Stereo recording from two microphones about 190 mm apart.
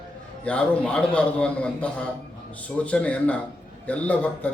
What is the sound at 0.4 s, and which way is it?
A man's voice, 5° left (ahead or behind).